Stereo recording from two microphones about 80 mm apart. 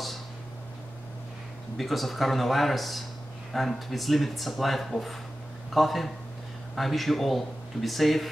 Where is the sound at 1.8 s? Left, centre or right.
Centre.